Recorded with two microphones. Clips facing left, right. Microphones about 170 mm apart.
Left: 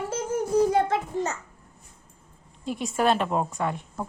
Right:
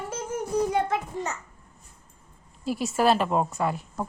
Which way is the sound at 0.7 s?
30° left (ahead or behind).